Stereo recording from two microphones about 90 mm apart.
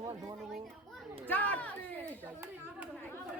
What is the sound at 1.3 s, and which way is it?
Speech, 15° left (ahead or behind).